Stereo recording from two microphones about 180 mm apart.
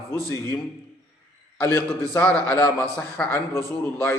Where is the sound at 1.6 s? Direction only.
15° left (ahead or behind).